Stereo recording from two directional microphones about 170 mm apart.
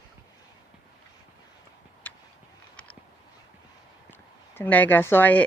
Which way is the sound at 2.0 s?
10° left (ahead or behind).